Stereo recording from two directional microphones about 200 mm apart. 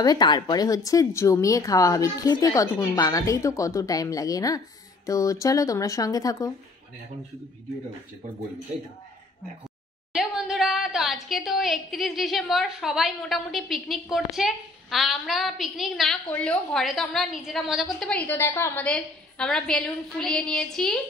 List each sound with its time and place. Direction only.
0.0 s speech: 20° left (ahead or behind)
10.1 s a woman's voice: 5° right (ahead or behind)